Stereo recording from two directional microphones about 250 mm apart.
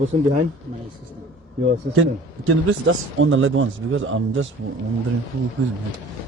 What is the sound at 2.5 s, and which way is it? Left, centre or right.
A man's voice, right.